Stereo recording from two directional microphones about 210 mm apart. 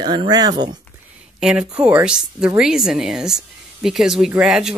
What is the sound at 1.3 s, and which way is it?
Speech, 5° right (ahead or behind).